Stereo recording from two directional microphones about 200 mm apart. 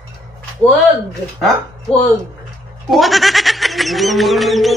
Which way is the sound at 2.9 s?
Centre (ahead or behind).